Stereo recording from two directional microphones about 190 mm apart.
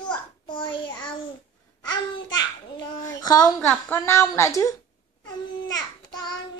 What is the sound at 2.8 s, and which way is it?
A woman's voice, 20° left (ahead or behind).